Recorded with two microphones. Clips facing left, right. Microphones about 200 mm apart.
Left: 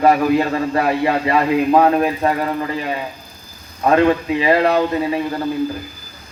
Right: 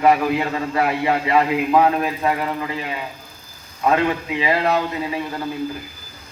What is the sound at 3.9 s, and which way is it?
Speech, 45° left (ahead or behind).